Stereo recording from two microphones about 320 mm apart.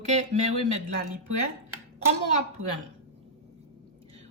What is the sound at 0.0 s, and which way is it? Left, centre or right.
Speech, right.